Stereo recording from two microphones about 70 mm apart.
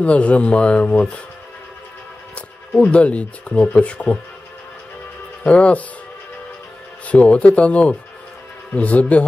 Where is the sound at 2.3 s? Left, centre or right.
Centre.